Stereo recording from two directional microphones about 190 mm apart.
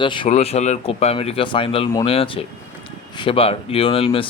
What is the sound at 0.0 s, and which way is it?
Speech, 25° left (ahead or behind).